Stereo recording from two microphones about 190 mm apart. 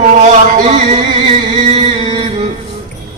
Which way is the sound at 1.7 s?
35° right (ahead or behind).